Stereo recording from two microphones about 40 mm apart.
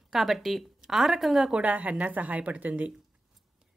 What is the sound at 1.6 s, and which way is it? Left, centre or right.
A woman's voice, right.